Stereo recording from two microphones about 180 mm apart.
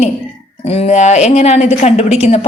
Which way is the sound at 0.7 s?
40° left (ahead or behind).